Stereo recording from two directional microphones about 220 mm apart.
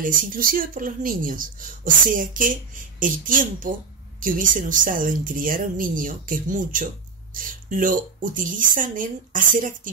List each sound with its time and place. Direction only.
0.0 s a woman's voice: 40° right (ahead or behind)